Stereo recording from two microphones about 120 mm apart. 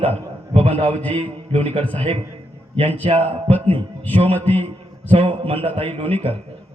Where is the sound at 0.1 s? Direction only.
65° right (ahead or behind).